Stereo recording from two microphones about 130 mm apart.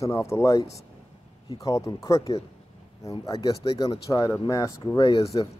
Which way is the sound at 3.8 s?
25° left (ahead or behind).